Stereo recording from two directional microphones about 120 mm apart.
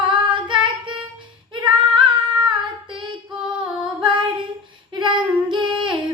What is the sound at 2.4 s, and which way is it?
Child singing, 45° right (ahead or behind).